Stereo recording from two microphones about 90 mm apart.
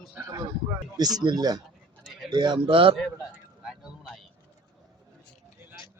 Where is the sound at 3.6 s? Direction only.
5° right (ahead or behind).